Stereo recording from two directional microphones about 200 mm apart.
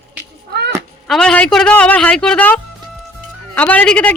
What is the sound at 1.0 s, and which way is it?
A woman's voice, 5° left (ahead or behind).